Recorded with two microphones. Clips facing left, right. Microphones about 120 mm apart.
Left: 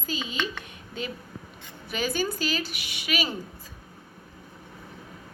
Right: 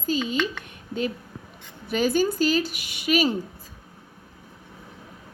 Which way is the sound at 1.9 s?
50° right (ahead or behind).